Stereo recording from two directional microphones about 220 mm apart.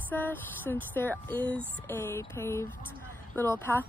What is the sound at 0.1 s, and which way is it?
Speech, 10° left (ahead or behind).